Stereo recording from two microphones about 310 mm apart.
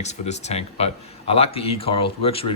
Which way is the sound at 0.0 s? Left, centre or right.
Left.